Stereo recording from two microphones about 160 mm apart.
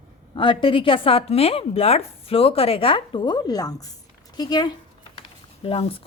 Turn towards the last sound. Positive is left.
turn(degrees=35)  # may be behind; listen again after turning